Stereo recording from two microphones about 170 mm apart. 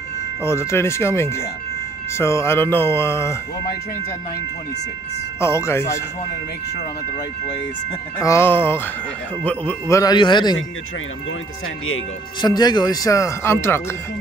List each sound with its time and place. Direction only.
0.4 s speech: 15° left (ahead or behind)
5.4 s speech: 15° left (ahead or behind)
8.2 s speech: 15° left (ahead or behind)
10.1 s speech: 25° left (ahead or behind)
12.4 s speech: 25° left (ahead or behind)